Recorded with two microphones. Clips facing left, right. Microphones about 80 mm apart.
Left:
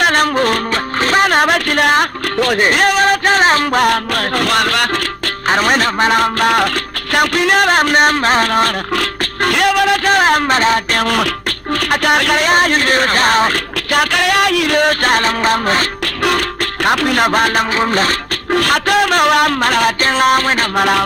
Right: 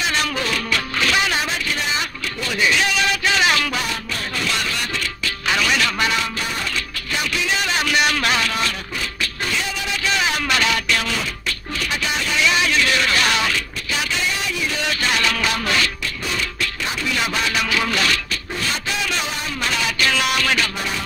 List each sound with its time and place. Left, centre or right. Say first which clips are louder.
0.0 s music: left 10 dB; left
3.8 s music: left 13 dB; left
5.5 s music: left 7 dB; left
8.9 s music: left 9 dB; left
16.3 s music: left 9 dB; left
17.7 s music: left 6 dB; left
18.5 s music: left 14 dB; left
20.7 s music: left 13 dB; left